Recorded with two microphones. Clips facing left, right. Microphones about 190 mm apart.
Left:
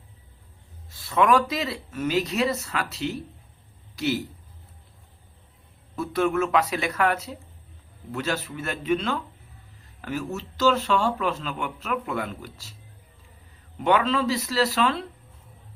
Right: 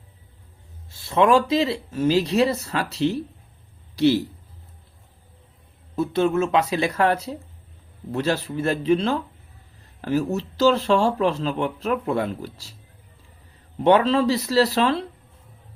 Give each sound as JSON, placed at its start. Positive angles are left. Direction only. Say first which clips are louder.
{"t": 0.9, "sound": "a man's voice", "louder": "right 3 dB", "side_deg": -25}
{"t": 6.0, "sound": "speech", "louder": "right 3 dB", "side_deg": -25}
{"t": 13.7, "sound": "speech", "louder": "right 5 dB", "side_deg": -35}